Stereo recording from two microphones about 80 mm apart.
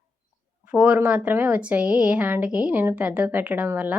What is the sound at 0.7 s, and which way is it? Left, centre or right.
Speech, centre.